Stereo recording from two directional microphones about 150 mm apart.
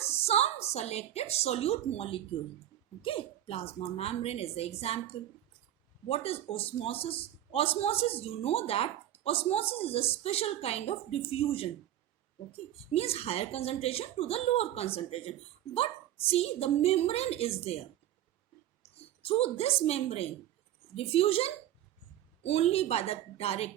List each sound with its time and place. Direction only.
0.3 s a woman's voice: 45° left (ahead or behind)
6.1 s a woman's voice: 40° left (ahead or behind)
18.8 s a woman's voice: 40° left (ahead or behind)